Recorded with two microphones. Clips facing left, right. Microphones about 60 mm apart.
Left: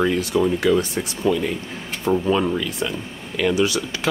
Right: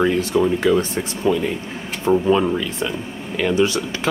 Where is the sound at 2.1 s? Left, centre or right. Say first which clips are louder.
Right 3 dB; right.